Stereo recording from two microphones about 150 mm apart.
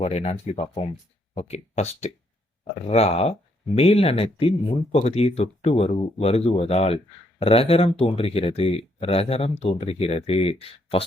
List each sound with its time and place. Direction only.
0.0 s speech: 45° left (ahead or behind)